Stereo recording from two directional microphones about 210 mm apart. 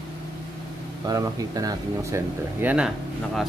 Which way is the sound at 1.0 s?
15° right (ahead or behind).